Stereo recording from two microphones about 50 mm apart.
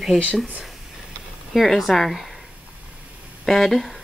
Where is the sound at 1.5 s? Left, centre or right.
Centre.